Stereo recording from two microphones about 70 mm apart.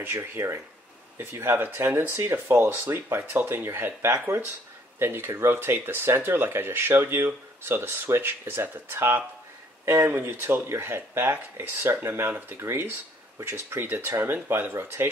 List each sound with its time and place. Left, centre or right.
0.0 s speech: right